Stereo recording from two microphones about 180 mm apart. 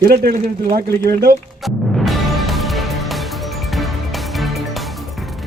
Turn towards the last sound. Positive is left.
turn(degrees=0)  # may be behind; listen again after turning